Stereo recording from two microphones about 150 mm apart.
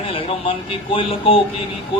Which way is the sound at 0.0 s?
40° left (ahead or behind).